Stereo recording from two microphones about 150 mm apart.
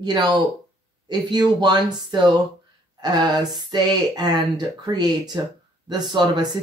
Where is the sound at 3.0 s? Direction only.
30° right (ahead or behind).